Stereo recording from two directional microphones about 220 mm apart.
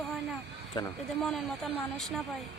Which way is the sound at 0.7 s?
20° left (ahead or behind).